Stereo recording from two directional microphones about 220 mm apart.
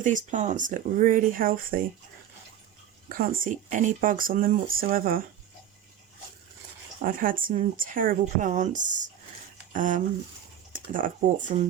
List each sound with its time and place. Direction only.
0.0 s speech: 35° right (ahead or behind)
3.1 s speech: 40° right (ahead or behind)
7.0 s speech: 40° right (ahead or behind)